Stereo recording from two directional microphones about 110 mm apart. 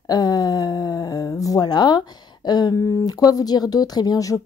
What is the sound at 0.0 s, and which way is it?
Speech, 35° left (ahead or behind).